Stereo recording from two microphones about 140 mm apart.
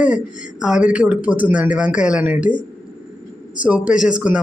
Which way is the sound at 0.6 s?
5° right (ahead or behind).